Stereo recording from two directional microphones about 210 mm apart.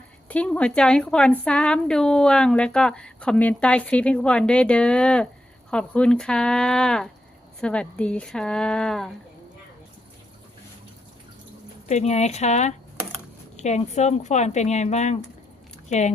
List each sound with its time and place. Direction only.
0.3 s a woman's voice: 5° left (ahead or behind)
11.9 s speech: 30° left (ahead or behind)